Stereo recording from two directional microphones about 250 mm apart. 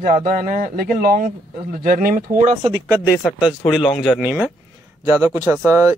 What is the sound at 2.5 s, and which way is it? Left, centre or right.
Speech, centre.